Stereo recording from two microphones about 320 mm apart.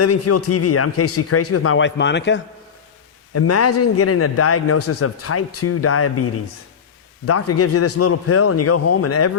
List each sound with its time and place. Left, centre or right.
0.0 s a man's voice: left
3.3 s a man's voice: left